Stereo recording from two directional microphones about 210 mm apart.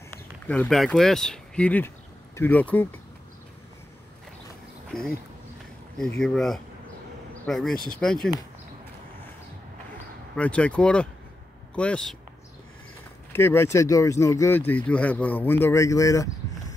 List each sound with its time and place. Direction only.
0.5 s speech: 5° left (ahead or behind)
4.9 s speech: 45° left (ahead or behind)
5.9 s speech: 5° left (ahead or behind)
10.3 s speech: 5° left (ahead or behind)
13.3 s speech: 10° left (ahead or behind)